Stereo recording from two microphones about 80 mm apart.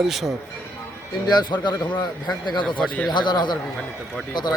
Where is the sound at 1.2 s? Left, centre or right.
Left.